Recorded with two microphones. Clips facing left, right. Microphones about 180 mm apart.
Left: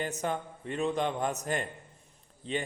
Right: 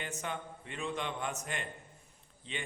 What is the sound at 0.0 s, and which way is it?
A man's voice, 40° left (ahead or behind).